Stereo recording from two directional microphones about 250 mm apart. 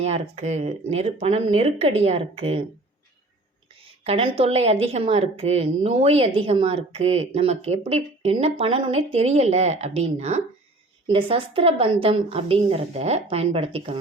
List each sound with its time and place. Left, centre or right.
0.0 s a woman's voice: right
3.8 s a woman's voice: right